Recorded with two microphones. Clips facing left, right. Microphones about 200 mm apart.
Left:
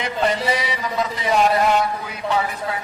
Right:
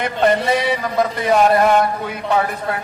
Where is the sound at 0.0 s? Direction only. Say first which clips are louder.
Right 5 dB; 55° right (ahead or behind).